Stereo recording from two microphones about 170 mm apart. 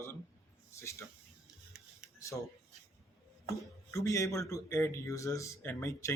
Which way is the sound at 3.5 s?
20° left (ahead or behind).